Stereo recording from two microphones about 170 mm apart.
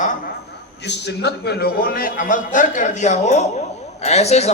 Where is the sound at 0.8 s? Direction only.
85° left.